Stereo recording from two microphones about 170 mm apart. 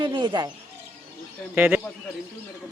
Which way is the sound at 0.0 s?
25° right (ahead or behind).